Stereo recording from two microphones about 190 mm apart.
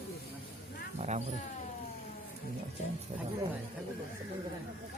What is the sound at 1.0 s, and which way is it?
Speech, 35° right (ahead or behind).